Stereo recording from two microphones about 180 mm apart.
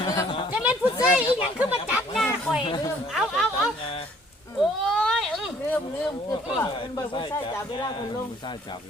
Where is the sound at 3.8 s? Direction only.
30° left (ahead or behind).